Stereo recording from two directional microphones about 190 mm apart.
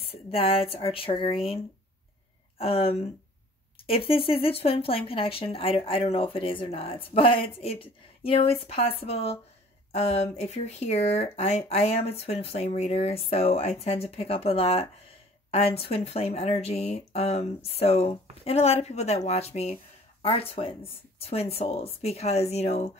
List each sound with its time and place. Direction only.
0.0 s speech: 30° left (ahead or behind)
2.6 s speech: 30° left (ahead or behind)